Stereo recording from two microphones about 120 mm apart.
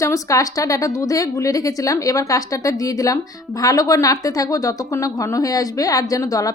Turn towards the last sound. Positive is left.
turn(degrees=30)  # may be behind; listen again after turning